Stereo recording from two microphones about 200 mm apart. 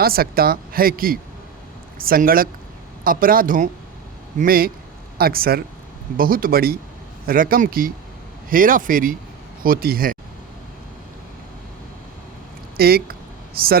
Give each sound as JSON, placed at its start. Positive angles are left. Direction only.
{"t": 0.0, "sound": "speech", "side_deg": -50}
{"t": 12.7, "sound": "speech", "side_deg": -50}